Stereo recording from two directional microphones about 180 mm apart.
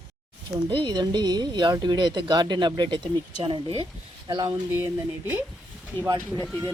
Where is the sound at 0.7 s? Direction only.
25° right (ahead or behind).